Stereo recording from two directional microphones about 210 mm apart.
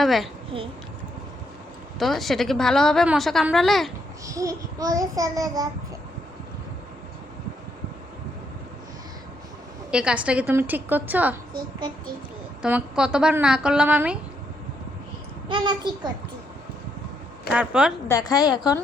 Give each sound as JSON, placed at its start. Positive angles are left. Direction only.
{"t": 0.0, "sound": "a woman's voice", "side_deg": 0}
{"t": 0.5, "sound": "a child's voice", "side_deg": -25}
{"t": 2.0, "sound": "a woman's voice", "side_deg": 0}
{"t": 4.3, "sound": "a woman's voice", "side_deg": -15}
{"t": 9.9, "sound": "a woman's voice", "side_deg": -5}
{"t": 12.6, "sound": "a woman's voice", "side_deg": -5}
{"t": 15.4, "sound": "a child's voice", "side_deg": -20}
{"t": 17.5, "sound": "a woman's voice", "side_deg": -5}
{"t": 18.1, "sound": "a woman's voice", "side_deg": 20}